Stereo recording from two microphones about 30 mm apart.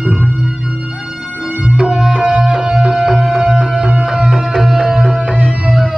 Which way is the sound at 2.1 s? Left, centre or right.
Right.